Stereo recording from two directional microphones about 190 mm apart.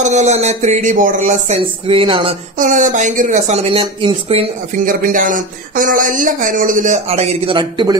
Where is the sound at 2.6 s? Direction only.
45° right (ahead or behind).